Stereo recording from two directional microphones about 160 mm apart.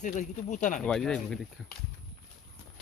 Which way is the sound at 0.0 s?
50° left (ahead or behind).